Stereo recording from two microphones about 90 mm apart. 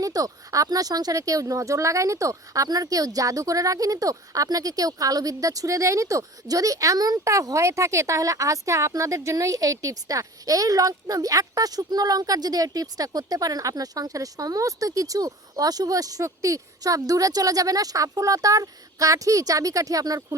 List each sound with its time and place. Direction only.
0.0 s speech: 40° right (ahead or behind)